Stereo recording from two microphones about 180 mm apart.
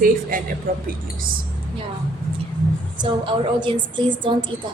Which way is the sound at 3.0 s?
25° right (ahead or behind).